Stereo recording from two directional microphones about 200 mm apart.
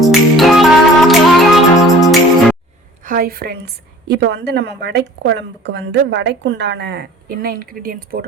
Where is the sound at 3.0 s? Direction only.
45° right (ahead or behind).